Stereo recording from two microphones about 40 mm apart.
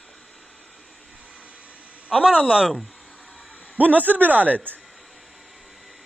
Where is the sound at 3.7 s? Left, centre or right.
Right.